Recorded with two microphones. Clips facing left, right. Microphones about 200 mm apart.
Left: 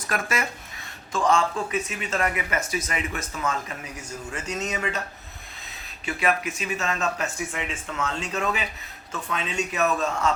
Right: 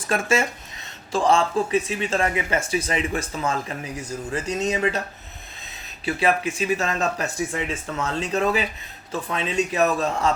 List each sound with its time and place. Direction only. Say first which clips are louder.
0.1 s speech: right 6 dB; 25° right (ahead or behind)
6.1 s speech: right 4 dB; 30° right (ahead or behind)